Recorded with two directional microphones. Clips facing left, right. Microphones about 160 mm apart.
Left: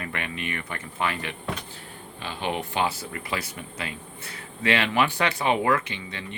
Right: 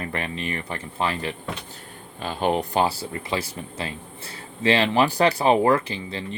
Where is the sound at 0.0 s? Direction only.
35° right (ahead or behind).